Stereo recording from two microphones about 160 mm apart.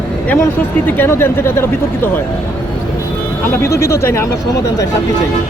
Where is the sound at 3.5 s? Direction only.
20° left (ahead or behind).